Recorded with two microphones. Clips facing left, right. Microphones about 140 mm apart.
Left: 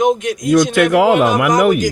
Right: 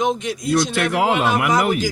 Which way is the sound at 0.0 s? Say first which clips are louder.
Left 6 dB; 50° left (ahead or behind).